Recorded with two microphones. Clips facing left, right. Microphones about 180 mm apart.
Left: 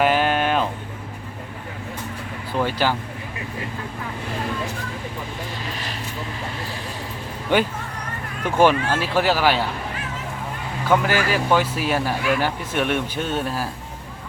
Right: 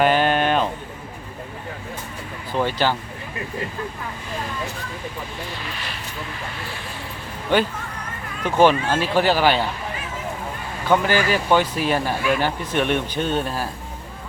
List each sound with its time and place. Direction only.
0.0 s a sound: 5° left (ahead or behind)
2.6 s speech: 5° left (ahead or behind)
5.6 s speech: 40° left (ahead or behind)
8.4 s speech: 10° left (ahead or behind)
10.8 s speech: 5° left (ahead or behind)